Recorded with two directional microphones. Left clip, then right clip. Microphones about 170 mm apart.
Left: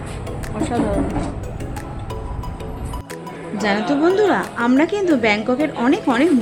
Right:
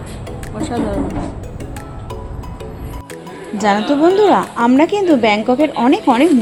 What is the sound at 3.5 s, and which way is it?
A woman's voice, 20° right (ahead or behind).